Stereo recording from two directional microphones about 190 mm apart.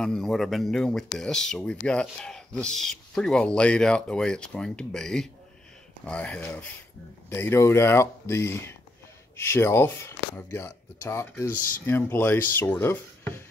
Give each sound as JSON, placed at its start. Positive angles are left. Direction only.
{"t": 0.0, "sound": "speech", "side_deg": 5}